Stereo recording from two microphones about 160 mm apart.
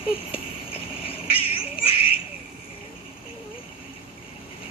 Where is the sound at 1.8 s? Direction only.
35° left (ahead or behind).